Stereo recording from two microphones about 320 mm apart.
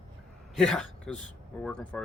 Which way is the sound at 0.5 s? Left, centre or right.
Centre.